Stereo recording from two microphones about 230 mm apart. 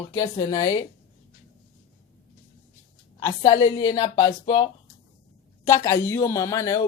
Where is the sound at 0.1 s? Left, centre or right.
Centre.